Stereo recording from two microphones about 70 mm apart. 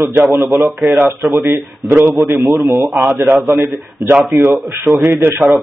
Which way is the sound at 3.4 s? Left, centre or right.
Right.